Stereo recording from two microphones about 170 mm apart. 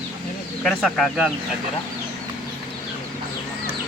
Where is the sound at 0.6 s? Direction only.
Centre (ahead or behind).